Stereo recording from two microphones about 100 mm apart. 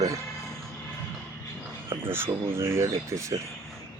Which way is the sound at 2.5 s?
25° right (ahead or behind).